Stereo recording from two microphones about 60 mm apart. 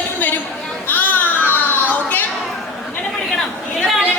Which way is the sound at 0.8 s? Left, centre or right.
Left.